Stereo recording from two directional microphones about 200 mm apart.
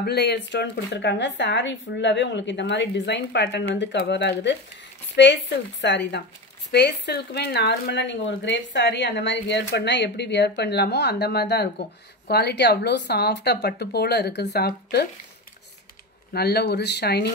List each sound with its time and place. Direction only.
0.0 s speech: 55° left (ahead or behind)
16.3 s speech: 50° left (ahead or behind)